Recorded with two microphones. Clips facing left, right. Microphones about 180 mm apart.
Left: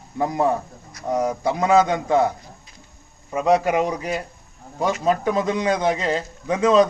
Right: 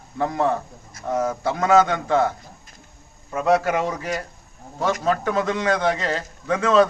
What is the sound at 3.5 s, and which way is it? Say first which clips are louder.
A man's voice: left 2 dB; 15° left (ahead or behind).